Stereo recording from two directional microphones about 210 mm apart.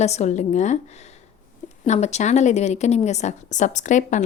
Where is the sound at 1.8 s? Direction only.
30° left (ahead or behind).